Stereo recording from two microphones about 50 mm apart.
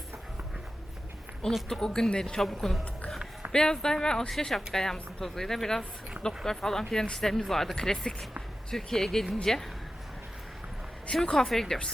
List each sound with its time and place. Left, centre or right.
1.8 s speech: centre
3.5 s speech: centre
11.1 s speech: centre